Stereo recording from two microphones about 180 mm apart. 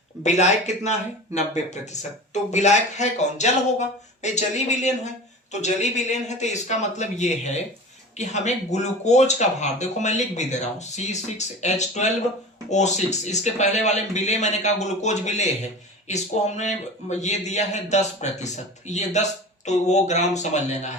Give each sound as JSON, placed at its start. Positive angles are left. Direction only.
{"t": 0.2, "sound": "speech", "side_deg": 40}